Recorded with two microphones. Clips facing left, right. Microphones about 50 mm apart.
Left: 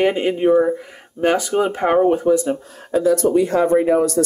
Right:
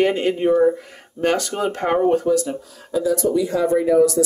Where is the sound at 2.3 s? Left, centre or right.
Left.